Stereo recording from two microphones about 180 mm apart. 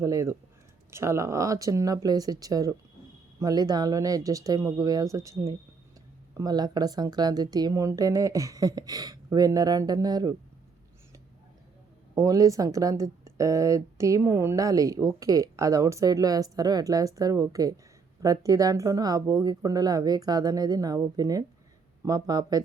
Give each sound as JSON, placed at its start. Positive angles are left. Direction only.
{"t": 0.0, "sound": "speech", "side_deg": -15}
{"t": 12.1, "sound": "speech", "side_deg": -20}